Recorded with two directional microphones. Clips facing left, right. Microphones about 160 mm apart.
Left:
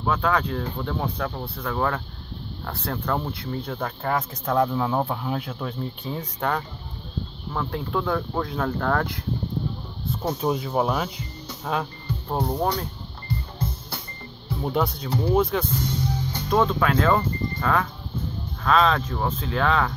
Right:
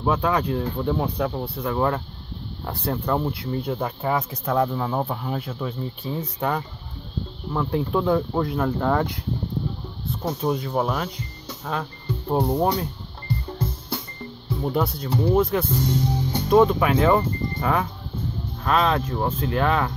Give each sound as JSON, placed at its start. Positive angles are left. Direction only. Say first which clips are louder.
{"t": 0.0, "sound": "speech", "louder": "right 1 dB", "side_deg": -15}
{"t": 7.5, "sound": "speech", "louder": "right 4 dB", "side_deg": -15}
{"t": 10.4, "sound": "speech", "louder": "even", "side_deg": 5}
{"t": 12.3, "sound": "speech", "louder": "right 4 dB", "side_deg": -10}
{"t": 14.6, "sound": "speech", "louder": "right 1 dB", "side_deg": 0}
{"t": 16.3, "sound": "speech", "louder": "right 6 dB", "side_deg": -20}